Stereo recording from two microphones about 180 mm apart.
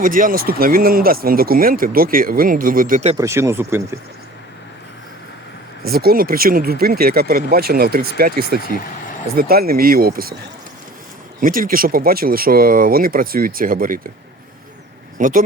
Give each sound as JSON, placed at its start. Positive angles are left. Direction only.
{"t": 0.0, "sound": "speech", "side_deg": -50}
{"t": 3.2, "sound": "speech", "side_deg": -15}
{"t": 5.8, "sound": "speech", "side_deg": -55}
{"t": 11.3, "sound": "speech", "side_deg": -50}
{"t": 15.2, "sound": "speech", "side_deg": -50}